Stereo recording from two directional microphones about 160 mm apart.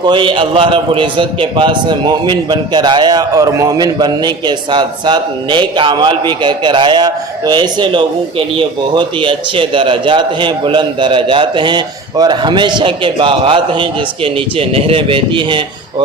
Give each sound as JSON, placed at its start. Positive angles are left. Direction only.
{"t": 0.0, "sound": "a man's voice", "side_deg": -30}